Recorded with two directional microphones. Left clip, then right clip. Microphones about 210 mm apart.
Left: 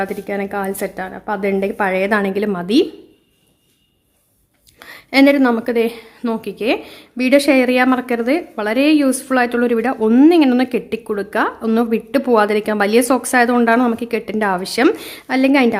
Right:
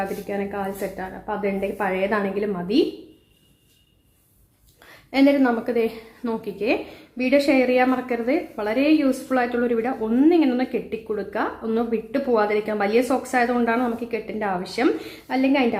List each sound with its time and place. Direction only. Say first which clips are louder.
0.0 s a woman's voice: left 5 dB; 55° left (ahead or behind)
4.8 s a woman's voice: left 7 dB; 50° left (ahead or behind)